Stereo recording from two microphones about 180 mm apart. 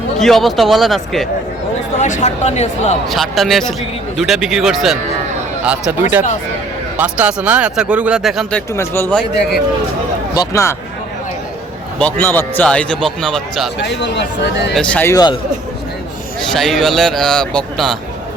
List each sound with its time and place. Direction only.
0.2 s a man's voice: centre (ahead or behind)
2.0 s speech: 40° left (ahead or behind)
3.1 s a man's voice: centre (ahead or behind)
8.7 s a man's voice: 15° left (ahead or behind)
10.3 s a man's voice: 20° left (ahead or behind)
11.9 s a man's voice: 10° left (ahead or behind)
13.8 s speech: 70° left (ahead or behind)
14.8 s a man's voice: 10° left (ahead or behind)
16.4 s a man's voice: centre (ahead or behind)